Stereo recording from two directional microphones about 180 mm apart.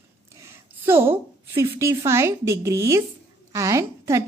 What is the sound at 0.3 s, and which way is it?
A woman's voice, 15° right (ahead or behind).